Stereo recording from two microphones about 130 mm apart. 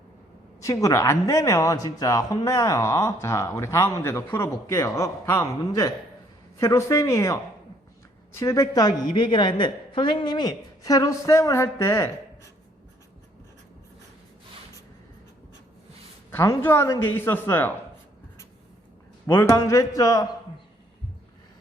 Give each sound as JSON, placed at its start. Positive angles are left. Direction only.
{"t": 0.6, "sound": "speech", "side_deg": 25}
{"t": 8.4, "sound": "speech", "side_deg": 25}
{"t": 16.3, "sound": "speech", "side_deg": 20}
{"t": 19.3, "sound": "speech", "side_deg": 20}